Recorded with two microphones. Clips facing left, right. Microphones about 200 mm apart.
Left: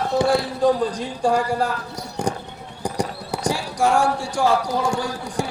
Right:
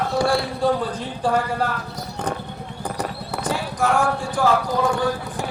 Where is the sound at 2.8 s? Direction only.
10° left (ahead or behind).